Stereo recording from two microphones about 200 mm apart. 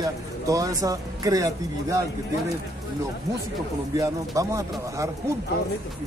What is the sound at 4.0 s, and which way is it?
Speech, 15° right (ahead or behind).